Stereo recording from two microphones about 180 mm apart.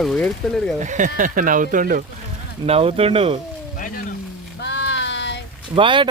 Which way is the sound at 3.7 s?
50° left (ahead or behind).